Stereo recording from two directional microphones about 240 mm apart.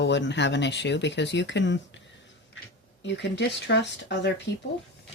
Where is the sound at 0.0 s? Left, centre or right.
Left.